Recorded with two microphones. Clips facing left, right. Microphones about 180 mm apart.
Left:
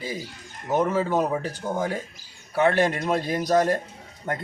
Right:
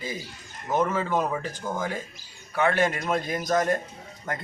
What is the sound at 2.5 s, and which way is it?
Speech, 30° left (ahead or behind).